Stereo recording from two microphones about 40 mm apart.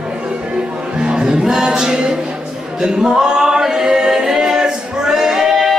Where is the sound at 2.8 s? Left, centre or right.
Centre.